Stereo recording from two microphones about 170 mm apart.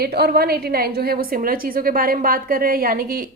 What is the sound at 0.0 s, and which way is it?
A woman's voice, 70° right (ahead or behind).